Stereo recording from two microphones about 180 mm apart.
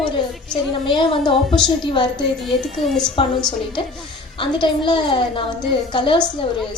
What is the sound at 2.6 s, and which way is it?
Speech, centre (ahead or behind).